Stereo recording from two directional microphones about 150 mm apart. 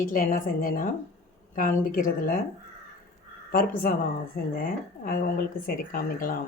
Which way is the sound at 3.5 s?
70° left (ahead or behind).